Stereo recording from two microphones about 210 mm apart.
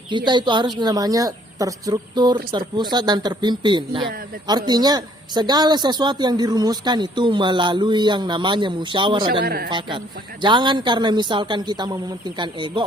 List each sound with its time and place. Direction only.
0.1 s a woman's voice: 20° right (ahead or behind)
9.4 s speech: 45° right (ahead or behind)
9.6 s a woman's voice: 20° right (ahead or behind)